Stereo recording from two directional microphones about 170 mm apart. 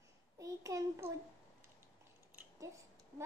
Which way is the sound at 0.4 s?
20° right (ahead or behind).